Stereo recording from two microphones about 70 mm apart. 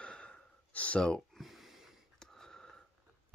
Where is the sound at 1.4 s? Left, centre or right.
Centre.